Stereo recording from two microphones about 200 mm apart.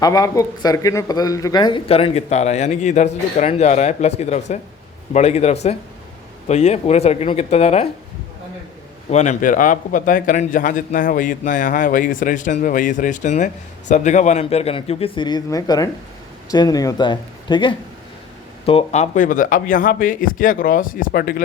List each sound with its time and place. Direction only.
0.0 s a man's voice: 20° left (ahead or behind)
9.0 s a man's voice: 35° left (ahead or behind)